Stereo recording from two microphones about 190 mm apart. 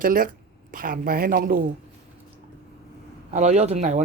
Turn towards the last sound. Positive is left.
turn(degrees=-35)  # may be behind; listen again after turning